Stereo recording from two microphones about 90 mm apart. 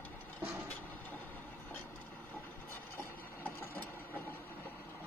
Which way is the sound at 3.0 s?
25° left (ahead or behind).